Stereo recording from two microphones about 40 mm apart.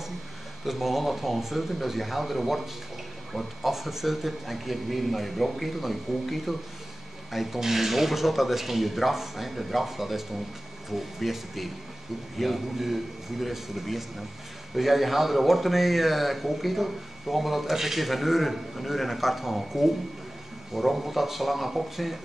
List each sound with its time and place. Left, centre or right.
0.7 s speech: centre